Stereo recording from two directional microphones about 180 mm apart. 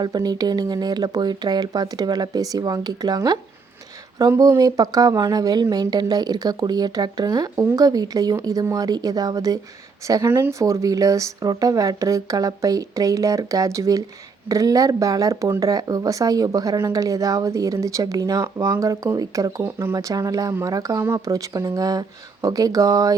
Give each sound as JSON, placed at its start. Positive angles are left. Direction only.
{"t": 0.0, "sound": "speech", "side_deg": -25}